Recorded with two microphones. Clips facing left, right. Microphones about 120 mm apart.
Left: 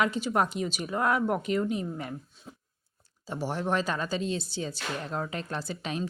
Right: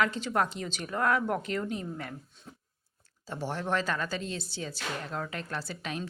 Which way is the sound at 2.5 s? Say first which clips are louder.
Left 2 dB; 10° left (ahead or behind).